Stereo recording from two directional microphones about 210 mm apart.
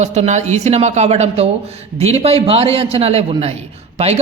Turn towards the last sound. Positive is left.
turn(degrees=-30)  # may be behind; listen again after turning